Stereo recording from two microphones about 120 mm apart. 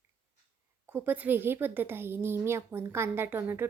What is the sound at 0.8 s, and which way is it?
A woman's voice, 15° right (ahead or behind).